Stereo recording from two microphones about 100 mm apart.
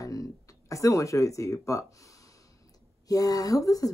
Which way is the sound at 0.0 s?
35° left (ahead or behind).